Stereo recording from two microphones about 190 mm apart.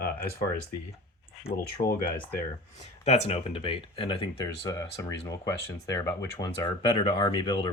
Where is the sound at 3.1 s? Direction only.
35° left (ahead or behind).